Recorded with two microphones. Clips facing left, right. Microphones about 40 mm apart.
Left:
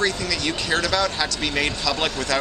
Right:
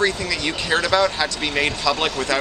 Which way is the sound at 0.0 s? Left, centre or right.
Centre.